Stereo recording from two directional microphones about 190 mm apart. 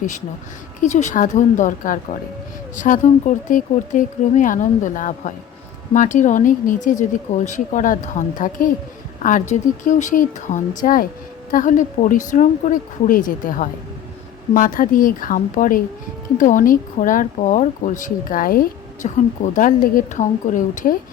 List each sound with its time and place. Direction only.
0.8 s speech: 40° left (ahead or behind)